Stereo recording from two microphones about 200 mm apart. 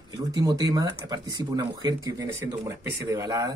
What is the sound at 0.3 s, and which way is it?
Speech, 20° right (ahead or behind).